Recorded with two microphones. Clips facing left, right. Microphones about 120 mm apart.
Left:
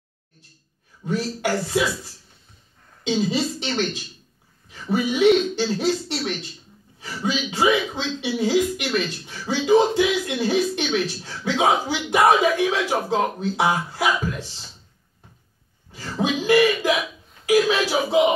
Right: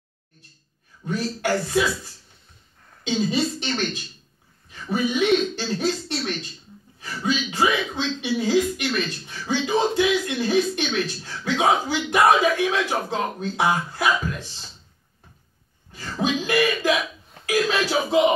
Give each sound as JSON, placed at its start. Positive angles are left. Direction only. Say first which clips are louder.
{"t": 1.0, "sound": "speech", "louder": "left 1 dB", "side_deg": 20}
{"t": 3.0, "sound": "speech", "louder": "left 1 dB", "side_deg": 15}
{"t": 15.9, "sound": "a sound", "louder": "even", "side_deg": 15}
{"t": 17.5, "sound": "speech", "louder": "left 4 dB", "side_deg": 15}